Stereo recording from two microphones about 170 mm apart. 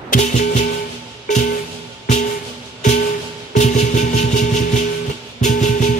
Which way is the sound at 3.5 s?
45° left (ahead or behind).